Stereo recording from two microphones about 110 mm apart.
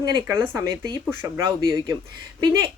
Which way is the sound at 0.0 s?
40° right (ahead or behind).